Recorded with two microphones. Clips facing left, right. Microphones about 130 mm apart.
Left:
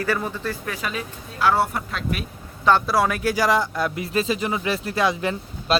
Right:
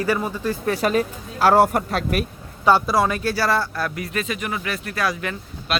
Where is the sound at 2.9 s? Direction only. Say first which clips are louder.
Even; 5° left (ahead or behind).